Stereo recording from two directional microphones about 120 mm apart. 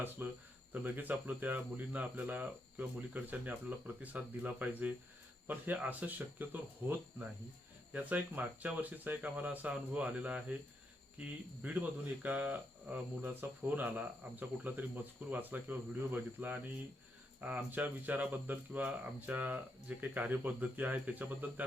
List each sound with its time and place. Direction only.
0.2 s speech: 20° right (ahead or behind)
11.6 s speech: 15° right (ahead or behind)
17.7 s speech: 15° right (ahead or behind)